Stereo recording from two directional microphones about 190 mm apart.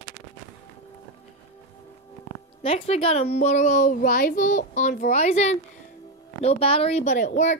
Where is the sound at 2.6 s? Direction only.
30° left (ahead or behind).